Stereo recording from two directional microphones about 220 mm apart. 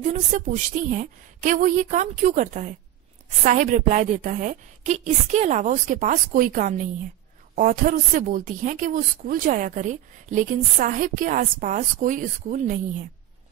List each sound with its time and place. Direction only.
0.1 s a woman's voice: 35° right (ahead or behind)